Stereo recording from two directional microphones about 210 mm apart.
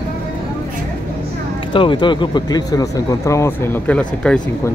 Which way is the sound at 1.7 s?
25° left (ahead or behind).